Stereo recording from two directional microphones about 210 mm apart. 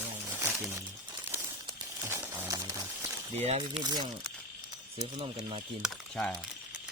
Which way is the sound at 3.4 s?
30° right (ahead or behind).